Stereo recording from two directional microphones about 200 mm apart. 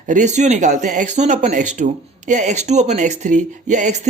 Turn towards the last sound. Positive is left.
turn(degrees=-35)  # may be behind; listen again after turning